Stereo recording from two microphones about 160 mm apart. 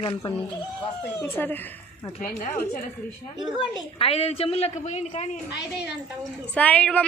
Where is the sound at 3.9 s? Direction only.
35° left (ahead or behind).